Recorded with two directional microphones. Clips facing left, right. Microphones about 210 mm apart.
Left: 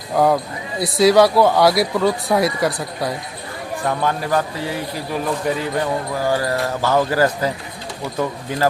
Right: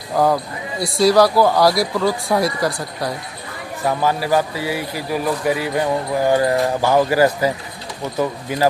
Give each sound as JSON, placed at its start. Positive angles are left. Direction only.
{"t": 0.1, "sound": "speech", "side_deg": 0}